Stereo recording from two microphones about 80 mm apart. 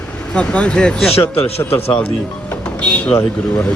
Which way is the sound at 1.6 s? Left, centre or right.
Left.